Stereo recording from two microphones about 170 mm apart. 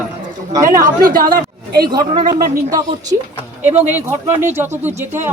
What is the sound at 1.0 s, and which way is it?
Speech, 60° right (ahead or behind).